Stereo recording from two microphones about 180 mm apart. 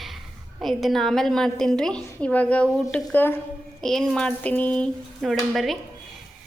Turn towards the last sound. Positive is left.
turn(degrees=0)  # may be behind; listen again after turning